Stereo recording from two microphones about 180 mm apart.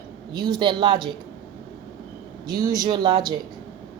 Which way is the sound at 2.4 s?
20° right (ahead or behind).